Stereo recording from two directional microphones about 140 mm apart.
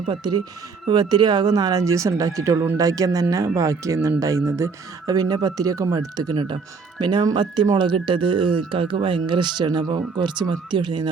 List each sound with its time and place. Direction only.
0.0 s speech: 35° right (ahead or behind)